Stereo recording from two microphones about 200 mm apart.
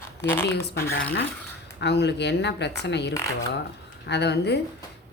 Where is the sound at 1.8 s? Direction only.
55° left (ahead or behind).